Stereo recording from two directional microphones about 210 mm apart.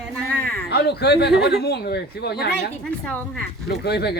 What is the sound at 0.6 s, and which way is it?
Speech, 50° left (ahead or behind).